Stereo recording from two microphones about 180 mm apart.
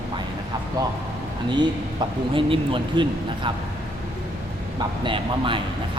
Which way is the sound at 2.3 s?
30° right (ahead or behind).